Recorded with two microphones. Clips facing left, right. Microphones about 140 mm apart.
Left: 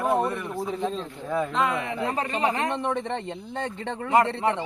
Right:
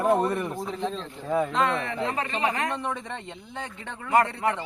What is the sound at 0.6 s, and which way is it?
Speech, 5° left (ahead or behind).